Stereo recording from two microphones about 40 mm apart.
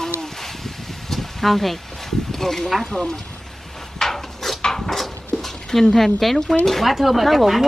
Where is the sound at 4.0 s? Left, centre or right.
Centre.